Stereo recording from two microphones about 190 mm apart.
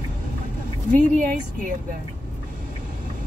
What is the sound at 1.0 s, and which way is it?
Speech, 45° right (ahead or behind).